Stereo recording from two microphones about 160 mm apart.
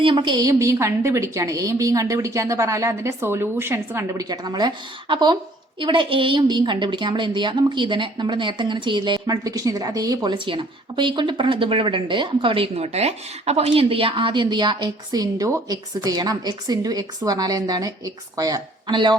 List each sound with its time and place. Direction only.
0.0 s a woman's voice: 30° right (ahead or behind)